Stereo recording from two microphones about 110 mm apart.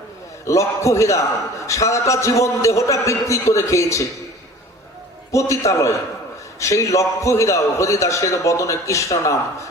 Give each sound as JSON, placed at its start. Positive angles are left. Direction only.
{"t": 0.4, "sound": "a man's voice", "side_deg": 30}
{"t": 5.3, "sound": "a man's voice", "side_deg": 30}